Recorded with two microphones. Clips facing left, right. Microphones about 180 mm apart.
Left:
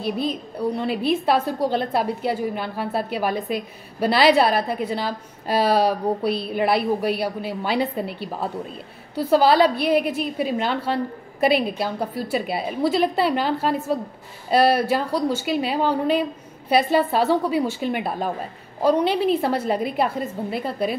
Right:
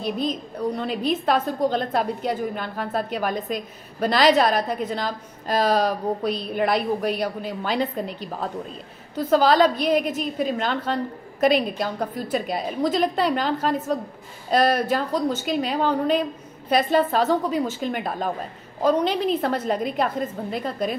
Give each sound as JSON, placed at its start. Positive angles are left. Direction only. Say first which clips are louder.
{"t": 0.0, "sound": "a woman's voice", "louder": "left 1 dB", "side_deg": 5}